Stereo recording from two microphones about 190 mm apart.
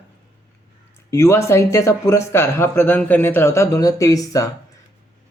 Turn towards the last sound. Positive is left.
turn(degrees=15)  # may be behind; listen again after turning